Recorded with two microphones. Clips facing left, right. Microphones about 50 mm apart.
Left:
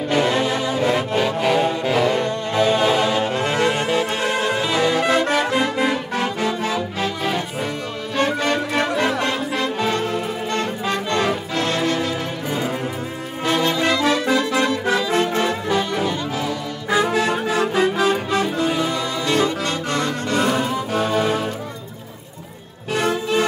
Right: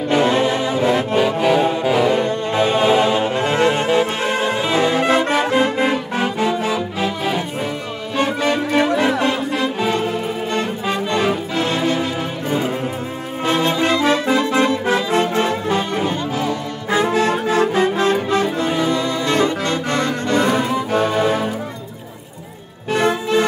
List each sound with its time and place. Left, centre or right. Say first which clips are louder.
0.1 s music: right 3 dB; right; by 2.2 s centre
2.2 s music: right 1 dB; right
13.5 s music: right 2 dB; right
22.9 s music: right 3 dB; right